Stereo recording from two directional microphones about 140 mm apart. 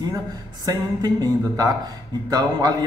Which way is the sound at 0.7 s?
25° right (ahead or behind).